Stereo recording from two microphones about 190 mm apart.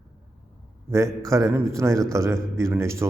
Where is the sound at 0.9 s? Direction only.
15° right (ahead or behind).